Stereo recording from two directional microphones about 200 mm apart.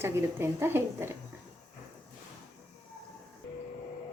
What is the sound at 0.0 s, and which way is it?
A woman's voice, 10° right (ahead or behind).